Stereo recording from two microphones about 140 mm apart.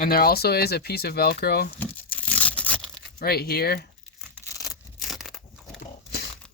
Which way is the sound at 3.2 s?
90° left.